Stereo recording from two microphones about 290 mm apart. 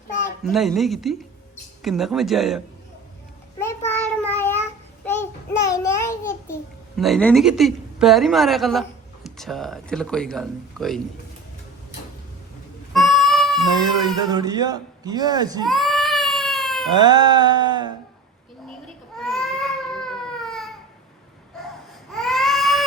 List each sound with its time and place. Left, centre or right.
0.1 s speech: left
0.4 s speech: centre
3.6 s child singing: centre
5.0 s babbling: centre
9.2 s speech: centre
12.9 s a sound: centre
13.7 s speech: centre
15.6 s cat: centre
17.0 s a sound: centre
19.2 s baby cry: centre
22.1 s baby cry: centre